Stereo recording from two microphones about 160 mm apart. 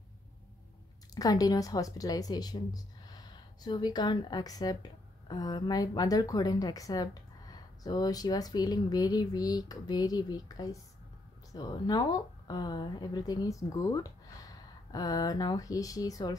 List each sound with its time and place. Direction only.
1.1 s speech: 25° left (ahead or behind)